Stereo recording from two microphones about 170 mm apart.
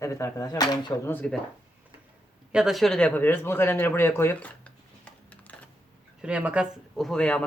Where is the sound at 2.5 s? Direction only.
5° right (ahead or behind).